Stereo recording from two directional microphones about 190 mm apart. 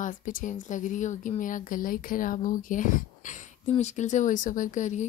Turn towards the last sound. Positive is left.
turn(degrees=40)  # may be behind; listen again after turning